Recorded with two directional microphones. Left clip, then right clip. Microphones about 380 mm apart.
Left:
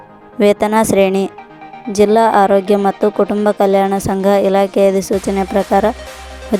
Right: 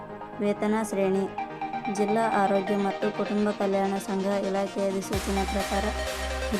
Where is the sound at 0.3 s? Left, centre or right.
Left.